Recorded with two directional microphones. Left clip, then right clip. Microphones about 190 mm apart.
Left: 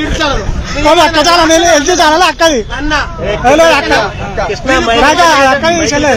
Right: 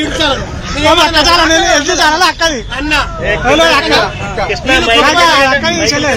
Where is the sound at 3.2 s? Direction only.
50° left (ahead or behind).